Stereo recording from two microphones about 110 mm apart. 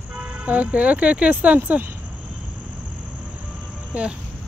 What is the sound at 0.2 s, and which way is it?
Speech, 15° right (ahead or behind).